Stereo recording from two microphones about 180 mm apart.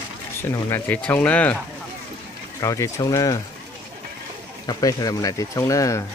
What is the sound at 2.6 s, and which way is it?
Speech, 20° left (ahead or behind).